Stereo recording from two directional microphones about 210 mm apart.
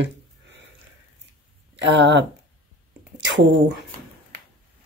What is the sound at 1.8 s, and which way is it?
Speech, 55° right (ahead or behind).